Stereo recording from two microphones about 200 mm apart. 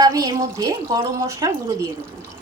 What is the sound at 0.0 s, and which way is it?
Speech, 20° right (ahead or behind).